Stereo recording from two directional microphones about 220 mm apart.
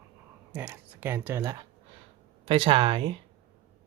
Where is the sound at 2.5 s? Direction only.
25° right (ahead or behind).